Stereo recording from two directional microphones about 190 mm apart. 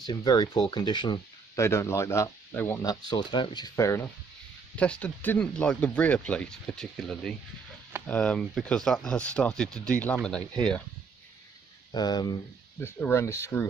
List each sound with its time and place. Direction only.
0.0 s speech: 20° left (ahead or behind); by 10.8 s 5° left (ahead or behind)
11.9 s speech: 20° left (ahead or behind)